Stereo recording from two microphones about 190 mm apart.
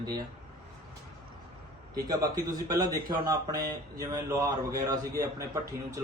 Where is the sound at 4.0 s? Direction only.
20° right (ahead or behind).